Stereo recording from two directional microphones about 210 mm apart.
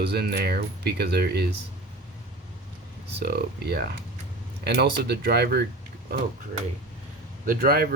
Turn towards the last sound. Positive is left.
turn(degrees=-45)  # may be behind; listen again after turning